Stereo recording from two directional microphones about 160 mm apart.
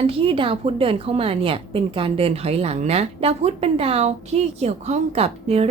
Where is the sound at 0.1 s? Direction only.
35° right (ahead or behind).